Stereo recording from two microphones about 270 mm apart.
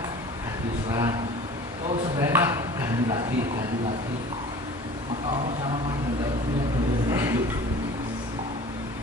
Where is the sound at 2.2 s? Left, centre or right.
Centre.